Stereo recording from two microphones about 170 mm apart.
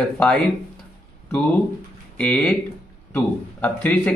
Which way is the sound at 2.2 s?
5° left (ahead or behind).